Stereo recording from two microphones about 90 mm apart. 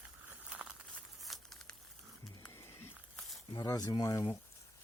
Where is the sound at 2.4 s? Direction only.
35° left (ahead or behind).